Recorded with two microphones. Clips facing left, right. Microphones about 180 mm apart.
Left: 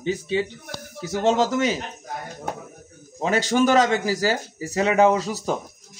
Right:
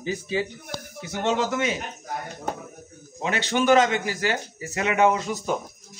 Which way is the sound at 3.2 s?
40° left (ahead or behind).